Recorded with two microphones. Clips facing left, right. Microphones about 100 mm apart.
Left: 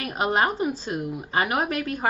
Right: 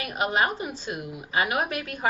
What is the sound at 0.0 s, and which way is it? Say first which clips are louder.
A woman's voice: left 2 dB; 40° left (ahead or behind).